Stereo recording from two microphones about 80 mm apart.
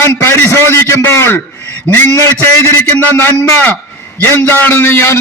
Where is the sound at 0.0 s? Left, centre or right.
Left.